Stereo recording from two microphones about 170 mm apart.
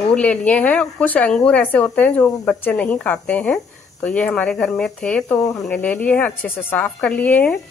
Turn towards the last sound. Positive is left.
turn(degrees=10)  # may be behind; listen again after turning